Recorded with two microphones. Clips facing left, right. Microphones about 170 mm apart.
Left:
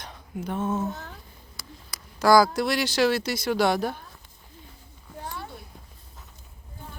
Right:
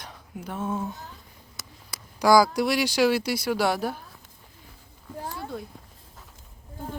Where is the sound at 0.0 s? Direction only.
10° right (ahead or behind).